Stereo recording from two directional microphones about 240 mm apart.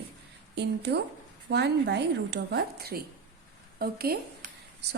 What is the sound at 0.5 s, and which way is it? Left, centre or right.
A woman's voice, right.